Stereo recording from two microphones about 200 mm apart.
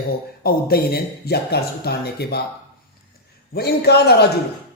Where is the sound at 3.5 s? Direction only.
55° left (ahead or behind).